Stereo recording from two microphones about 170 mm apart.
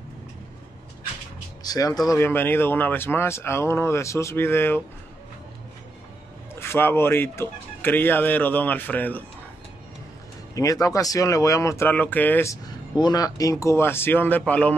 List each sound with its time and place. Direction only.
1.6 s speech: 20° left (ahead or behind)
6.5 s speech: 15° left (ahead or behind)
10.5 s speech: 20° left (ahead or behind)
12.9 s speech: 25° left (ahead or behind); by 14.8 s 5° left (ahead or behind)